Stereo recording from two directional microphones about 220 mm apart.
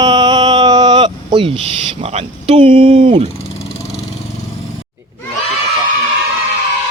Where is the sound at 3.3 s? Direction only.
30° left (ahead or behind).